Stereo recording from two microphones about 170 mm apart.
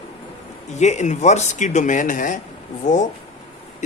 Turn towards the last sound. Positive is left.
turn(degrees=45)  # may be behind; listen again after turning